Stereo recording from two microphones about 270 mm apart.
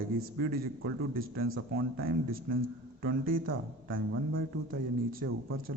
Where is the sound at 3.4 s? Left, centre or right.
Right.